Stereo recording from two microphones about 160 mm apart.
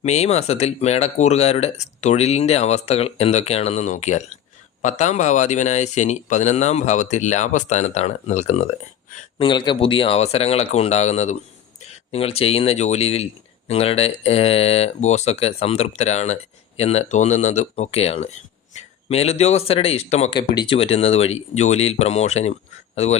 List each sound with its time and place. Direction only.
0.0 s speech: 45° left (ahead or behind)
9.4 s speech: 30° left (ahead or behind)
20.3 s speech: 35° left (ahead or behind)